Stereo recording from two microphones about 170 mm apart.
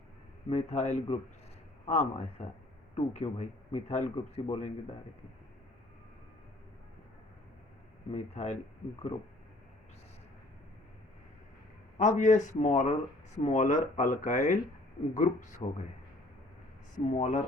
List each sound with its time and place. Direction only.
0.5 s speech: 40° left (ahead or behind)
8.1 s speech: 40° left (ahead or behind)
11.9 s speech: 45° left (ahead or behind)
17.1 s speech: 45° left (ahead or behind)